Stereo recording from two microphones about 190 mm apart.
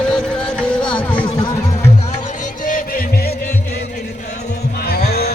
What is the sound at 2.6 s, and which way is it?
Music, 50° left (ahead or behind).